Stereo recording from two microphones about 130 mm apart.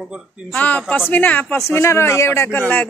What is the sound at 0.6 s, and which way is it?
Speech, 10° left (ahead or behind).